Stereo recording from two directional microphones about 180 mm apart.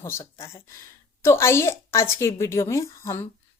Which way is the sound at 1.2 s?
15° left (ahead or behind).